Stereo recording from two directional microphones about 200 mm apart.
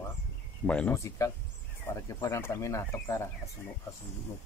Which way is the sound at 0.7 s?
5° left (ahead or behind).